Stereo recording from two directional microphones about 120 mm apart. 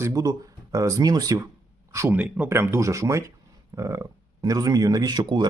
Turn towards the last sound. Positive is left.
turn(degrees=-40)  # may be behind; listen again after turning